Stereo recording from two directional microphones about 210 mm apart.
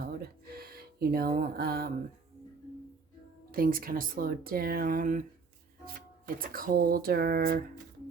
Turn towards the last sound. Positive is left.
turn(degrees=-45)  # may be behind; listen again after turning